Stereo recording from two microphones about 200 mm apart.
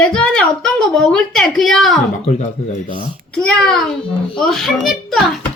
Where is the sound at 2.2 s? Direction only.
35° left (ahead or behind).